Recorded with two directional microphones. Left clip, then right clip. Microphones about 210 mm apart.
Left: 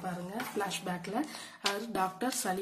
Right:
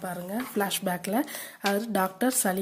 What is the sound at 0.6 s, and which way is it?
Speech, 40° right (ahead or behind).